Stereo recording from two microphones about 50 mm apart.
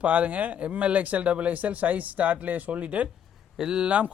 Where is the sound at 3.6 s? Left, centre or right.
Centre.